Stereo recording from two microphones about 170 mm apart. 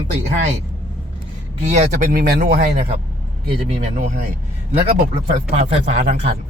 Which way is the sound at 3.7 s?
45° right (ahead or behind).